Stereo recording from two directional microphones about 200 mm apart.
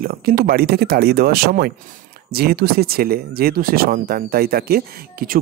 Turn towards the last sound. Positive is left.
turn(degrees=-45)  # may be behind; listen again after turning